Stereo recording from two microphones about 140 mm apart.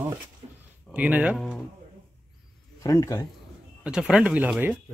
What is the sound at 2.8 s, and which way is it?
Speech, 25° left (ahead or behind).